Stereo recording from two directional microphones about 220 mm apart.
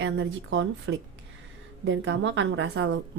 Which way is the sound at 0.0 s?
55° right (ahead or behind).